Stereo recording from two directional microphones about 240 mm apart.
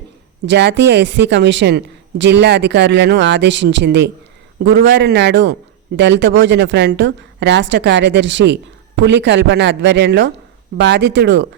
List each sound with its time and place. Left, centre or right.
0.4 s speech: right